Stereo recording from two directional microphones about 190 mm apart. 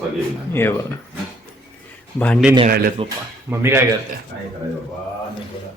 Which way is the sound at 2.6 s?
50° right (ahead or behind).